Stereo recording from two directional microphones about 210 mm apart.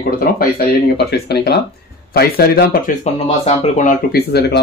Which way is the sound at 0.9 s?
50° left (ahead or behind).